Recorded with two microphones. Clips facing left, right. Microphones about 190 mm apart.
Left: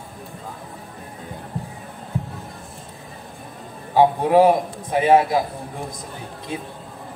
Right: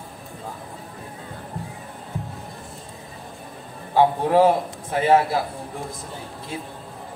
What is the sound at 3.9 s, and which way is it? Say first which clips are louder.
A man's voice: left 2 dB; 15° left (ahead or behind).